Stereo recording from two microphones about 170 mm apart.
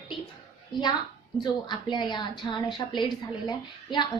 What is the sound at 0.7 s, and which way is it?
A woman's voice, 25° left (ahead or behind).